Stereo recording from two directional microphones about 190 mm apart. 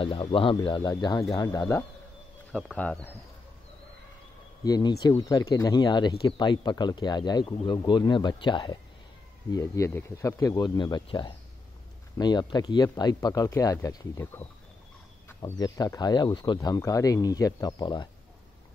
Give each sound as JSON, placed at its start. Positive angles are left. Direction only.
{"t": 0.0, "sound": "speech", "side_deg": 30}
{"t": 2.5, "sound": "speech", "side_deg": 5}
{"t": 4.6, "sound": "speech", "side_deg": 20}